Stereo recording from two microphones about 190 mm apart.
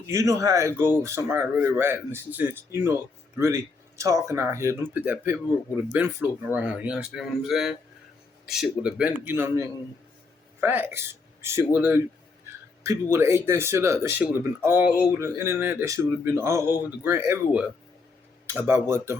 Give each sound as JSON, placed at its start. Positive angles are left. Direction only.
{"t": 0.1, "sound": "a man's voice", "side_deg": -15}